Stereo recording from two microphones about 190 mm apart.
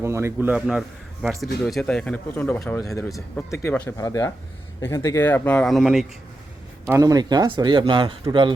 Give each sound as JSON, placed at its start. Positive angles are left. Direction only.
{"t": 0.0, "sound": "a man's voice", "side_deg": -15}
{"t": 6.8, "sound": "speech", "side_deg": -20}